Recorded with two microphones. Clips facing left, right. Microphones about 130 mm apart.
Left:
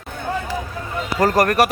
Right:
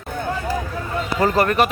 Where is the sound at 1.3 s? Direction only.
65° left (ahead or behind).